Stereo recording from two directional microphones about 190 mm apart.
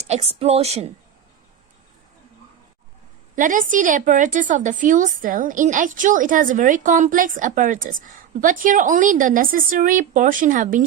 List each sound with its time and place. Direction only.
0.0 s a woman's voice: 35° right (ahead or behind)
3.3 s a woman's voice: 45° right (ahead or behind)